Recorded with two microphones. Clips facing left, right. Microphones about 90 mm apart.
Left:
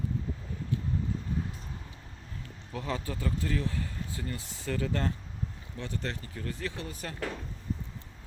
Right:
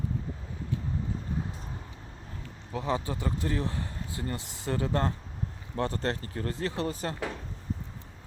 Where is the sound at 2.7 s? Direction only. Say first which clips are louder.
Right 4 dB; 20° right (ahead or behind).